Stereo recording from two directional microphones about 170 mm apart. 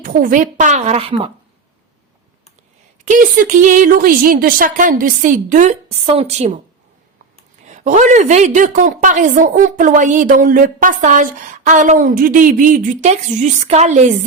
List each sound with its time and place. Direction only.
0.0 s a woman's voice: 55° right (ahead or behind); by 1.3 s 35° right (ahead or behind)
3.0 s a woman's voice: 50° right (ahead or behind)
7.6 s a woman's voice: 45° right (ahead or behind)